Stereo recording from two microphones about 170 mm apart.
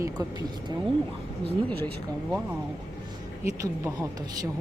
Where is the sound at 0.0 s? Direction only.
20° right (ahead or behind).